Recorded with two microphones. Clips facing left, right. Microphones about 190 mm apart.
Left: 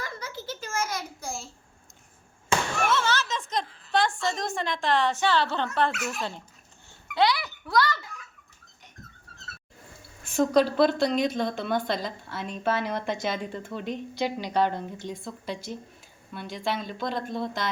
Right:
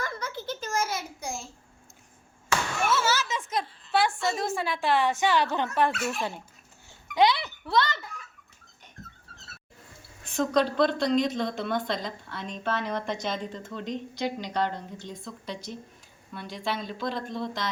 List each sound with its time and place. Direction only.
0.0 s a sound: 50° right (ahead or behind)
0.7 s a child's voice: 30° right (ahead or behind)
2.9 s a woman's voice: 5° right (ahead or behind)
5.9 s a child's voice: 30° right (ahead or behind)
10.2 s a woman's voice: 10° left (ahead or behind)
16.3 s a woman's voice: centre (ahead or behind)